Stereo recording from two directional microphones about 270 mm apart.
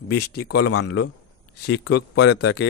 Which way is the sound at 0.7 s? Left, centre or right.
Left.